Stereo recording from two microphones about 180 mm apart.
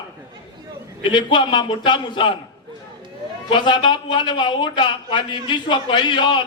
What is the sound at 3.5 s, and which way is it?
A man's voice, 25° left (ahead or behind).